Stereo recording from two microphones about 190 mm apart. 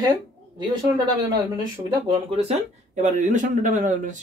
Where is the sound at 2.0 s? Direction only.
30° right (ahead or behind).